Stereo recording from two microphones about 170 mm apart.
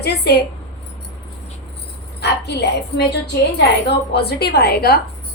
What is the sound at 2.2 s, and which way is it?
Speech, 75° left (ahead or behind).